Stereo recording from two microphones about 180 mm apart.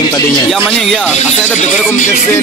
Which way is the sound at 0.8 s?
Centre (ahead or behind).